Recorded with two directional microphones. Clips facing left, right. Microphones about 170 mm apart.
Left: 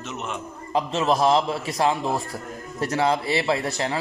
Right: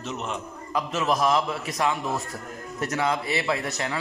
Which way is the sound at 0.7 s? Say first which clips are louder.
Left 3 dB; 30° left (ahead or behind).